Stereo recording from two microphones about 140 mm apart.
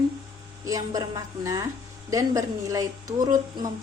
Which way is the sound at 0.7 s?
25° right (ahead or behind).